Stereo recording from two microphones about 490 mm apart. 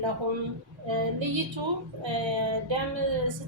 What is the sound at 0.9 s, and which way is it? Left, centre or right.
A woman's voice, right.